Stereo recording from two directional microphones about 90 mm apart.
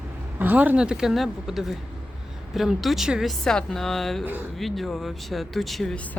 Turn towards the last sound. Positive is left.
turn(degrees=0)  # may be behind; listen again after turning